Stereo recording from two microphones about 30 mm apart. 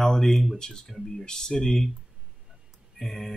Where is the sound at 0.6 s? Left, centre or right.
Left.